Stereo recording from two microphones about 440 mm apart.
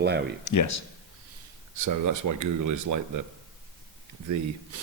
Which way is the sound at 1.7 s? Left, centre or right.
Right.